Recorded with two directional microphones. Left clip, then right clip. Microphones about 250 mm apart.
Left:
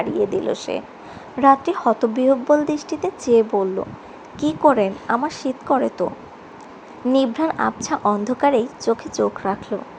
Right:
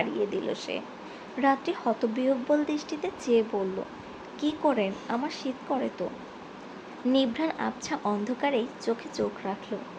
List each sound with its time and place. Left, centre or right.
0.0 s a woman's voice: centre
7.1 s speech: centre